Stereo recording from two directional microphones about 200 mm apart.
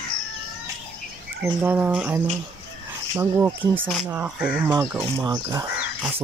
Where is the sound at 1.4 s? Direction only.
10° right (ahead or behind).